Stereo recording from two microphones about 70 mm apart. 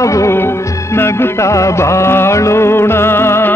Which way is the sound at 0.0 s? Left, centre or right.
Left.